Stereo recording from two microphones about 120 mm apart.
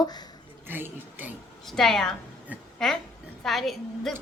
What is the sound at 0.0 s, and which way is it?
Speech, 35° left (ahead or behind).